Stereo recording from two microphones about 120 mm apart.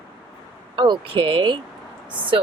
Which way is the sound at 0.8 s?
45° right (ahead or behind).